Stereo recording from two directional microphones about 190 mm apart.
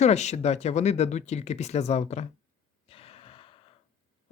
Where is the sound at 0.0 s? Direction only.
35° left (ahead or behind).